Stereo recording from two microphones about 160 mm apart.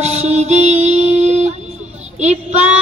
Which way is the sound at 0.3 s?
45° right (ahead or behind).